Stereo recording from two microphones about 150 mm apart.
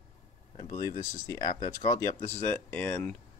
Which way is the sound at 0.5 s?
30° left (ahead or behind).